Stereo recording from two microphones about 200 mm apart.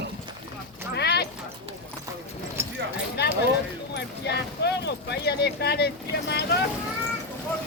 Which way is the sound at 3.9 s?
55° left (ahead or behind).